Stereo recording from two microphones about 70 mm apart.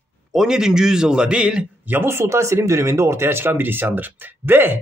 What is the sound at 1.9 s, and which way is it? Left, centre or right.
Speech, right.